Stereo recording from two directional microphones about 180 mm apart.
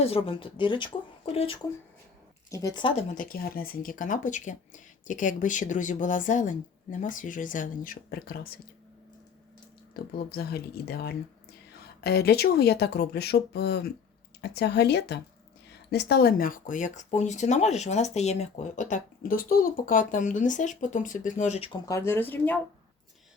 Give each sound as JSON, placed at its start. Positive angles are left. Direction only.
{"t": 0.0, "sound": "speech", "side_deg": 30}
{"t": 2.5, "sound": "speech", "side_deg": 20}
{"t": 2.9, "sound": "speech", "side_deg": 50}
{"t": 9.9, "sound": "speech", "side_deg": 60}
{"t": 21.8, "sound": "speech", "side_deg": 15}